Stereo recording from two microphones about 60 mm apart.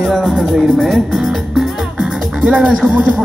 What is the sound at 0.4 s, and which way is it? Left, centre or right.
Speech, centre.